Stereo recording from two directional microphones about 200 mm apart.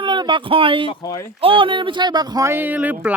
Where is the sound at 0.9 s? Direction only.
15° left (ahead or behind).